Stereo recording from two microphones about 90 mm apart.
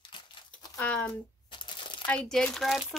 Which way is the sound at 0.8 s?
10° left (ahead or behind).